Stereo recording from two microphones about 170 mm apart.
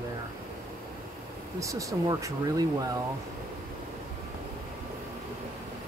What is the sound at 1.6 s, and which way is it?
Speech, 20° right (ahead or behind).